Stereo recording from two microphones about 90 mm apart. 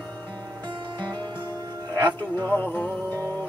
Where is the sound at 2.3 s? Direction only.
20° left (ahead or behind).